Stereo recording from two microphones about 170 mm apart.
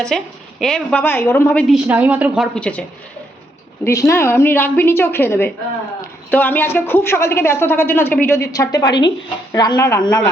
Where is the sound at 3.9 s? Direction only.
15° left (ahead or behind).